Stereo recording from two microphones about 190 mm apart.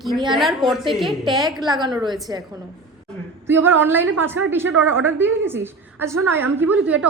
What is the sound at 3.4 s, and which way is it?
A woman's voice, 10° right (ahead or behind).